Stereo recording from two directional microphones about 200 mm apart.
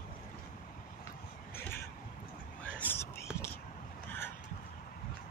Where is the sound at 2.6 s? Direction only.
5° left (ahead or behind).